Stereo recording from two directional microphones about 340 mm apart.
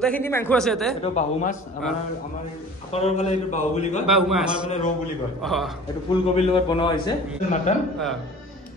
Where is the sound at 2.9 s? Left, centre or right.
Centre.